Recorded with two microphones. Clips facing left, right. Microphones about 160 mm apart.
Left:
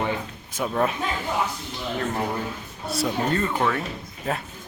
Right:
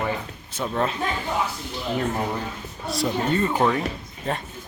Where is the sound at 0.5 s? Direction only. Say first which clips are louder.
Left 1 dB; 10° left (ahead or behind).